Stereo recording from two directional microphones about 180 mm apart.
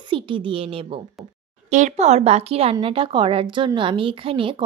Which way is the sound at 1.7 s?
40° right (ahead or behind).